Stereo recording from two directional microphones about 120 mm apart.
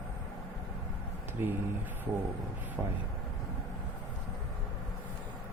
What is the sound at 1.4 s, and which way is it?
Speech, 20° right (ahead or behind).